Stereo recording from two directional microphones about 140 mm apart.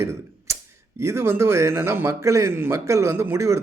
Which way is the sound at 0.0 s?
20° right (ahead or behind).